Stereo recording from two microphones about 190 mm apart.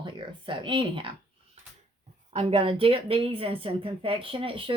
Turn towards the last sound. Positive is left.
turn(degrees=-25)  # may be behind; listen again after turning